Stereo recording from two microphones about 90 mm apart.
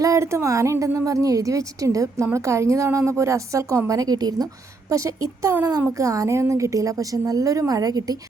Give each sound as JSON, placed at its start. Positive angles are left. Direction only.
{"t": 0.0, "sound": "a woman's voice", "side_deg": -35}
{"t": 4.9, "sound": "a woman's voice", "side_deg": -40}